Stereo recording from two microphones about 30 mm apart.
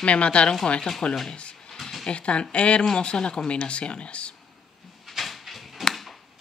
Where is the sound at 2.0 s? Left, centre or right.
Left.